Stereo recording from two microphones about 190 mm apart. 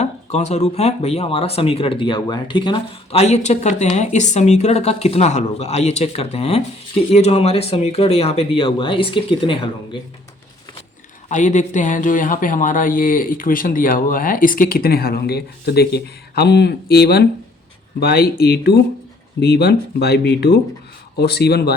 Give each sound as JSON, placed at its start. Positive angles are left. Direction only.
{"t": 0.0, "sound": "speech", "side_deg": 35}
{"t": 11.3, "sound": "speech", "side_deg": 40}